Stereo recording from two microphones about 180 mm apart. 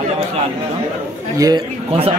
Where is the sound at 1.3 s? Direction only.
20° right (ahead or behind).